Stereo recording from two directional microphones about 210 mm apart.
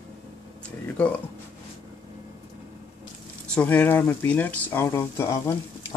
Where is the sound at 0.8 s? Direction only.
5° left (ahead or behind).